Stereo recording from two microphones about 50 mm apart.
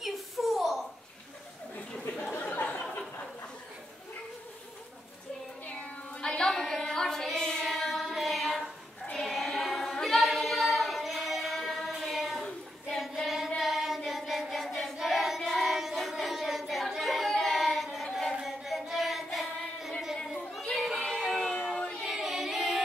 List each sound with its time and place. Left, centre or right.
0.0 s a sound: centre
2.0 s a sound: left
5.8 s music: centre
6.8 s carnatic music: centre
7.3 s child singing: centre
7.6 s child singing: centre
18.4 s singing: centre
21.2 s music: centre
21.6 s child singing: centre
22.0 s music: centre